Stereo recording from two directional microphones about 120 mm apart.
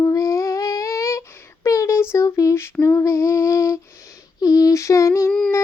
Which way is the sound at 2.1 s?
25° left (ahead or behind).